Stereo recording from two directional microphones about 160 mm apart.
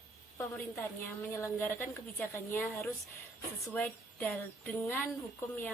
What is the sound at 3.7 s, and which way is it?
A woman's voice, 10° left (ahead or behind).